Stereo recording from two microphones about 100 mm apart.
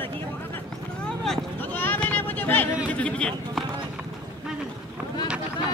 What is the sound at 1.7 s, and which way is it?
Vehicle, 20° left (ahead or behind).